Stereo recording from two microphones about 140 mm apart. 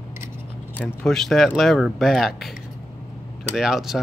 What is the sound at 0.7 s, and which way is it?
Speech, 10° left (ahead or behind).